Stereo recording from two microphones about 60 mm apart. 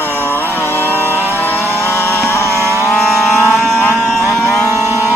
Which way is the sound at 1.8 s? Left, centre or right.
Left.